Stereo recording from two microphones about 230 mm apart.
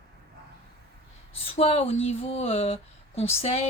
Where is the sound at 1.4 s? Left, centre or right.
Left.